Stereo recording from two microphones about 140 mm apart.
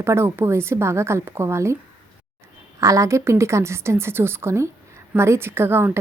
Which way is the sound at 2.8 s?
25° right (ahead or behind).